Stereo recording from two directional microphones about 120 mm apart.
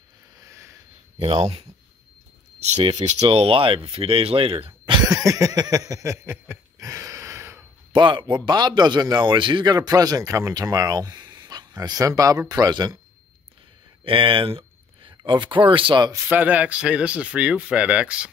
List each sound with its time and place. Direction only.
0.4 s a sound: 25° right (ahead or behind)
1.2 s speech: 55° right (ahead or behind)
3.0 s speech: 70° right (ahead or behind)
3.3 s speech: 50° right (ahead or behind); by 7.6 s 20° right (ahead or behind)
7.9 s speech: 45° right (ahead or behind)
14.0 s speech: 45° right (ahead or behind)
16.3 s speech: 15° right (ahead or behind)